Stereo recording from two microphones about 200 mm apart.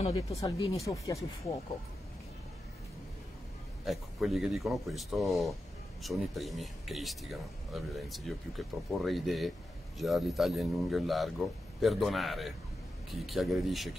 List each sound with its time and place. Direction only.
0.4 s speech: 20° left (ahead or behind)
3.8 s speech: centre (ahead or behind)